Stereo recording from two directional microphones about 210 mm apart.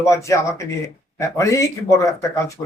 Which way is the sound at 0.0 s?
15° left (ahead or behind).